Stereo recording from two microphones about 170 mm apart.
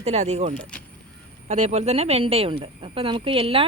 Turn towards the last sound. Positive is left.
turn(degrees=-35)  # may be behind; listen again after turning